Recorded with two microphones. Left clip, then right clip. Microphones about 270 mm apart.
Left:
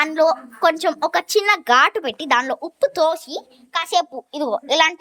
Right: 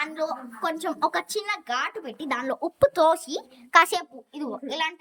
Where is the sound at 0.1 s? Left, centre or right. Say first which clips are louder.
Left 13 dB; centre.